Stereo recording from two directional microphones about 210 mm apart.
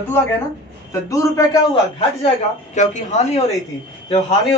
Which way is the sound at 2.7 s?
35° left (ahead or behind).